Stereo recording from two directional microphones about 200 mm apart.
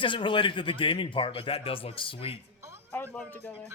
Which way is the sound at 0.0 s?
25° left (ahead or behind).